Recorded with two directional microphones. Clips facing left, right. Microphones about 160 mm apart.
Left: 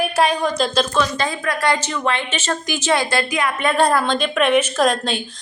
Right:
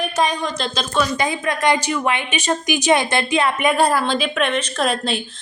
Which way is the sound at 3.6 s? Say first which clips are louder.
Left 4 dB; 10° right (ahead or behind).